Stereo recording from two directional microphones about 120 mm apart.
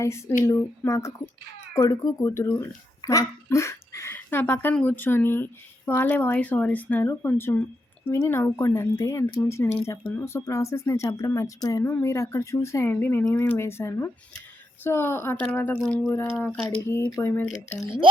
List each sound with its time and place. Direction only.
0.0 s speech: 25° left (ahead or behind)
16.1 s speech: 20° left (ahead or behind)